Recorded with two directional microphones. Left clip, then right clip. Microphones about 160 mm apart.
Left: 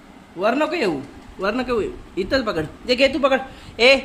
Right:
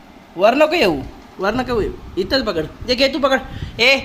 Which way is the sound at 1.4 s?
10° right (ahead or behind).